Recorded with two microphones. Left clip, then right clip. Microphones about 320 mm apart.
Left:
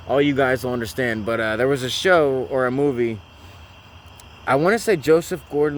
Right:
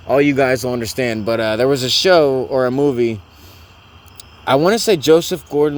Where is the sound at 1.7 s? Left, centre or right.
Centre.